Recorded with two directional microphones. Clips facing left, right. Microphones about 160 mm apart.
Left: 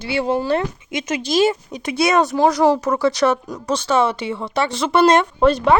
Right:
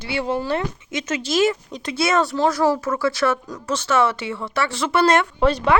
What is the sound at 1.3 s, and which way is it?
Speech, 30° left (ahead or behind).